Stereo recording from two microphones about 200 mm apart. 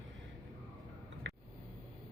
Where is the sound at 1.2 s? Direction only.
65° right (ahead or behind).